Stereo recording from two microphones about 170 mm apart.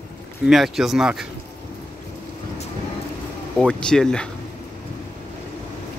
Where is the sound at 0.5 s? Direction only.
Centre (ahead or behind).